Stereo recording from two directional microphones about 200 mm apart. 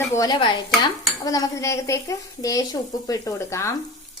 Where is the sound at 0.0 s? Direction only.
15° left (ahead or behind).